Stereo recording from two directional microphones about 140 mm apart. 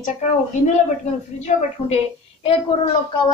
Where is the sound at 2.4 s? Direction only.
40° left (ahead or behind).